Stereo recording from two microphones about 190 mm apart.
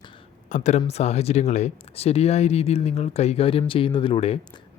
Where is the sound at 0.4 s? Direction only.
40° left (ahead or behind).